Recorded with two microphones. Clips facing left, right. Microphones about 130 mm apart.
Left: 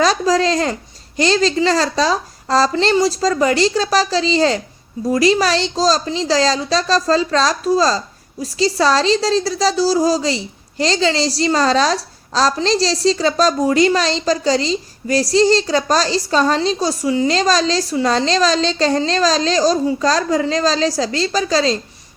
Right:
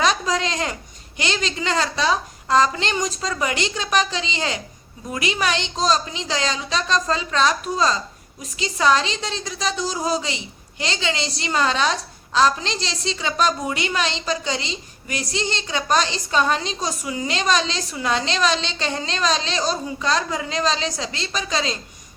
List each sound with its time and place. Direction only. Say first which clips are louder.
0.0 s a woman's voice: left 6 dB; 35° left (ahead or behind)